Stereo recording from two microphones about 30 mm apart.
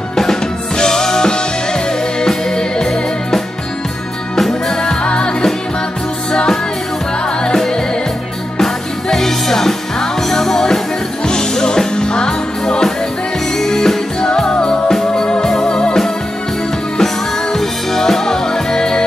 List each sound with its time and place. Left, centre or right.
0.1 s music: centre
4.4 s music: centre
5.0 s music: left
9.1 s music: centre
11.2 s music: left
13.6 s music: centre
17.0 s music: centre